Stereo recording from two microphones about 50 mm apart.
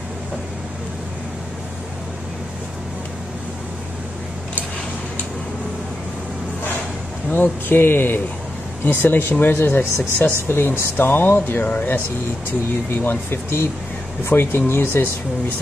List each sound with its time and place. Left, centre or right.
7.2 s speech: left
12.9 s speech: left